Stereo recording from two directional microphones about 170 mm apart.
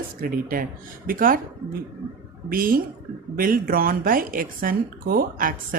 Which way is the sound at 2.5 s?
55° right (ahead or behind).